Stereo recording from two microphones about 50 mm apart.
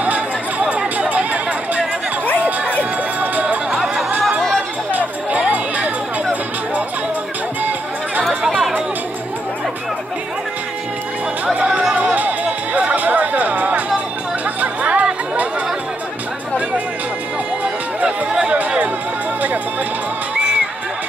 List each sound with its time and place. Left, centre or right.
0.0 s a sound: right
2.8 s music: right
4.9 s music: right
8.2 s chatter: right
11.5 s chatter: right
11.9 s music: right
18.0 s a sound: centre
18.5 s music: right